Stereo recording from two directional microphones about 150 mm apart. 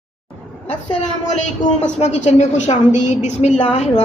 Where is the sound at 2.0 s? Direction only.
45° left (ahead or behind).